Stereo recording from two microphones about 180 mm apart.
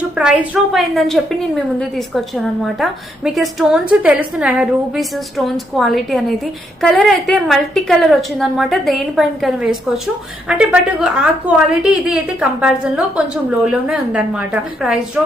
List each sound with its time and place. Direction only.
0.2 s a woman's voice: 5° right (ahead or behind)